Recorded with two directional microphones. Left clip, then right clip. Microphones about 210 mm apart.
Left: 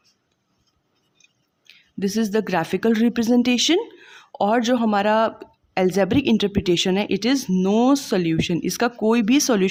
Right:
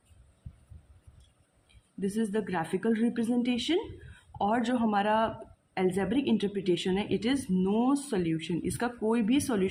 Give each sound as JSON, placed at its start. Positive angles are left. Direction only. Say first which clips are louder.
{"t": 1.6, "sound": "a woman's voice", "louder": "left 9 dB", "side_deg": 45}